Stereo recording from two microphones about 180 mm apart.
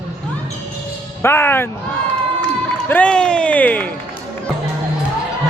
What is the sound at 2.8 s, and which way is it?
Speech, 10° left (ahead or behind).